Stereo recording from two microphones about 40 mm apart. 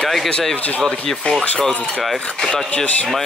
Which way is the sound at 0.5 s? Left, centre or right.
Left.